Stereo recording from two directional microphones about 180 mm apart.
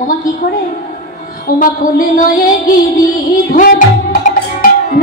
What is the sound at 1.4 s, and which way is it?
Music, 50° left (ahead or behind).